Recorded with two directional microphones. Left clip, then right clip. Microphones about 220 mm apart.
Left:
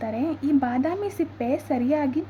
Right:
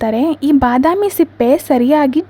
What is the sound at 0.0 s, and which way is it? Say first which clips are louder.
A woman's voice: right 12 dB; 45° right (ahead or behind).